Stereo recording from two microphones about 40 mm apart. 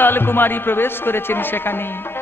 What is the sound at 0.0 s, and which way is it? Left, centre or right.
Music, left.